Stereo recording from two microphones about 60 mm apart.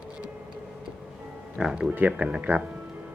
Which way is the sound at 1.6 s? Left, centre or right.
Centre.